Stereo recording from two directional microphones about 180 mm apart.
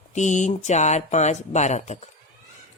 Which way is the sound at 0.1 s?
40° left (ahead or behind).